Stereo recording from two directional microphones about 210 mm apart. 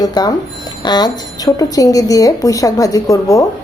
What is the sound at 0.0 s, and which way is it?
A woman's voice, 20° left (ahead or behind).